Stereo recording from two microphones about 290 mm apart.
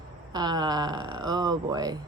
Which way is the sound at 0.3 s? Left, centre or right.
Centre.